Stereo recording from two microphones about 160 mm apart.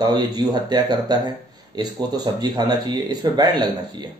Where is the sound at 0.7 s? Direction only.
25° right (ahead or behind).